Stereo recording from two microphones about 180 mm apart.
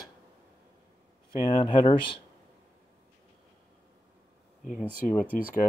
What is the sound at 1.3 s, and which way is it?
Speech, 25° left (ahead or behind).